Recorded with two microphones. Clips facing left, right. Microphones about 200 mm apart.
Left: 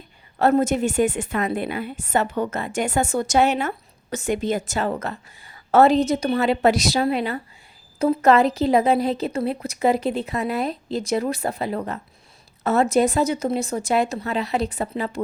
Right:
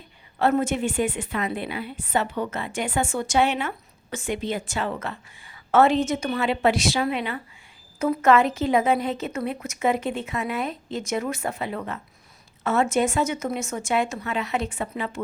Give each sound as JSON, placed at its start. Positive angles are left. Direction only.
{"t": 0.3, "sound": "a woman's voice", "side_deg": 40}